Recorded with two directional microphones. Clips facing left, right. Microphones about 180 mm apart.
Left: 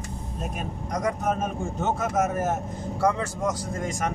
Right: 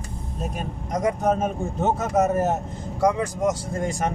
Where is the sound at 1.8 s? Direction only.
35° right (ahead or behind).